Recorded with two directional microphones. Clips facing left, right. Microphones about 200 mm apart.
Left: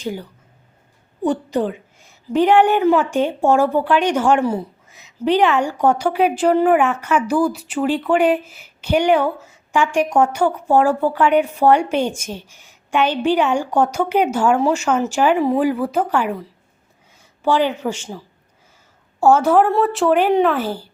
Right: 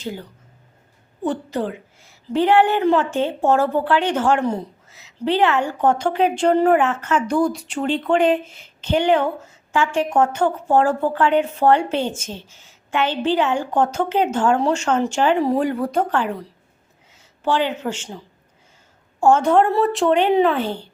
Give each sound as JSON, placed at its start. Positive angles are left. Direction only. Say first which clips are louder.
{"t": 0.0, "sound": "a woman's voice", "louder": "left 3 dB", "side_deg": 15}
{"t": 19.2, "sound": "speech", "louder": "left 1 dB", "side_deg": 5}